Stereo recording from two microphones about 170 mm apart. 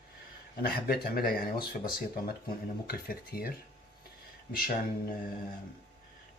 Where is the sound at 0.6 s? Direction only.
60° left (ahead or behind).